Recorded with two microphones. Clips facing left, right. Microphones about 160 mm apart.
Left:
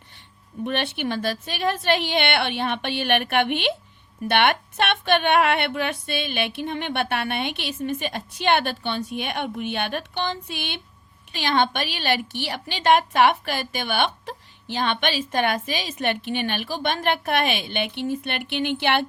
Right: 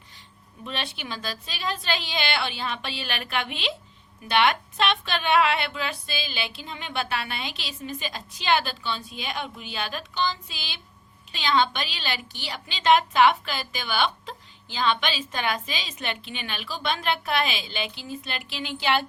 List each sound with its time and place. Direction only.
0.6 s a woman's voice: 60° left (ahead or behind)